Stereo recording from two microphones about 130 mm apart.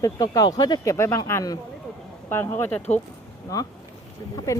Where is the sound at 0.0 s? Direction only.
30° left (ahead or behind).